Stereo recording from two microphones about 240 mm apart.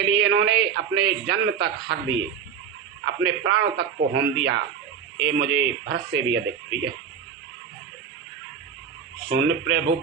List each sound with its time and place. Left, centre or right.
0.2 s speech: right
9.3 s speech: right